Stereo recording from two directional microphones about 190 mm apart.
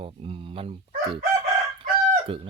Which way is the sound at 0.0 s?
30° right (ahead or behind).